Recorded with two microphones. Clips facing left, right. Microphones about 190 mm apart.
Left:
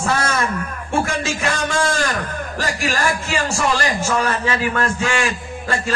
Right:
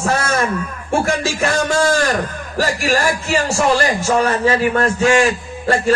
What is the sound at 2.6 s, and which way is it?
A man's voice, 35° right (ahead or behind).